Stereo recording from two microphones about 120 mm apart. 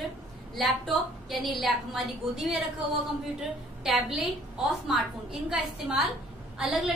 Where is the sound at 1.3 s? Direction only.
Centre (ahead or behind).